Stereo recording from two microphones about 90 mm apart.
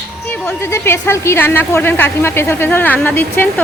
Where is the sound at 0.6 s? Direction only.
30° left (ahead or behind).